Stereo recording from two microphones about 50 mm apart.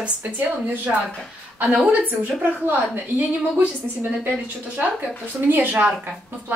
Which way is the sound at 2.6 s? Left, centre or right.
Right.